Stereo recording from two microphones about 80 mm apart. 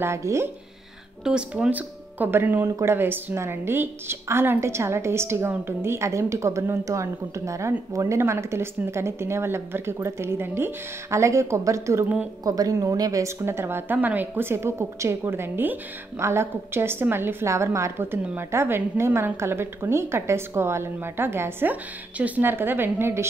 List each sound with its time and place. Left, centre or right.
0.0 s a woman's voice: right
1.2 s a woman's voice: centre; by 12.1 s right
12.4 s a woman's voice: right
13.4 s a woman's voice: right